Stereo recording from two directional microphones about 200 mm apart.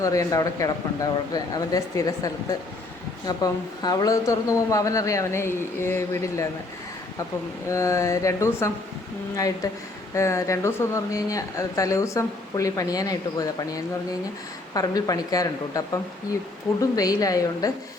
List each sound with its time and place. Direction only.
0.0 s speech: 15° left (ahead or behind)
7.7 s speech: 15° left (ahead or behind)
10.2 s a woman's voice: 15° left (ahead or behind)